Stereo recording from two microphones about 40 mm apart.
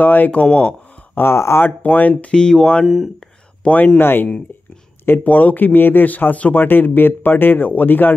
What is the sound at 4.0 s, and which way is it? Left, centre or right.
Speech, left.